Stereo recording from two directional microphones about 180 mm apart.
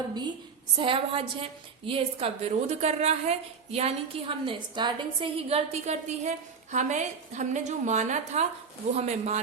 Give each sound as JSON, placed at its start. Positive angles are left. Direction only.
{"t": 0.1, "sound": "a woman's voice", "side_deg": -25}